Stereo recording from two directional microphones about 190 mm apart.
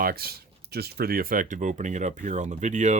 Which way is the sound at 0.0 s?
55° right (ahead or behind).